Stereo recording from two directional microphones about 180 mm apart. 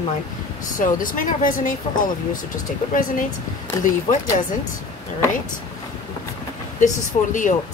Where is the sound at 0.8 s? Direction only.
50° left (ahead or behind).